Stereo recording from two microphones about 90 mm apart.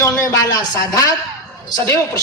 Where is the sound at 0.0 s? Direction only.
40° left (ahead or behind).